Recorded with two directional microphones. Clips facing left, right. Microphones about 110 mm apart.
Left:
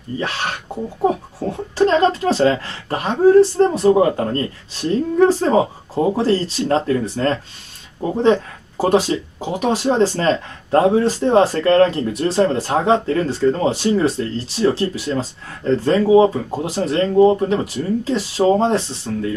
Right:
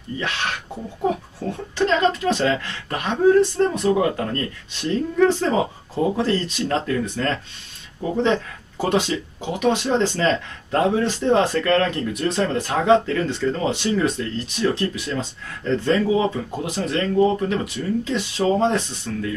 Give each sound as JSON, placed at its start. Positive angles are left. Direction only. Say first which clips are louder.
{"t": 0.2, "sound": "a child's voice", "louder": "left 2 dB", "side_deg": 35}
{"t": 6.1, "sound": "speech", "louder": "left 4 dB", "side_deg": 35}